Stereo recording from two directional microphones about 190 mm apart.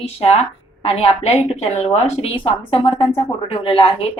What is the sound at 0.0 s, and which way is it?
A woman's voice, 30° left (ahead or behind).